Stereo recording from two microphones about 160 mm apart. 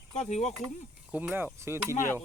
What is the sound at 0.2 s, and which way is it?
Speech, 45° left (ahead or behind).